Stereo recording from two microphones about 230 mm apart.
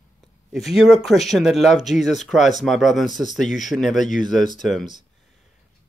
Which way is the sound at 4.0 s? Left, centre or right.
Left.